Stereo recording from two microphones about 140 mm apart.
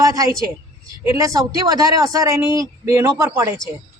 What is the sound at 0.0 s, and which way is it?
A man's voice, 25° right (ahead or behind).